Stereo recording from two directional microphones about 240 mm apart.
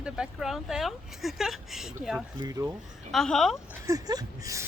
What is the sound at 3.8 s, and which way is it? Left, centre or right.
Speech, centre.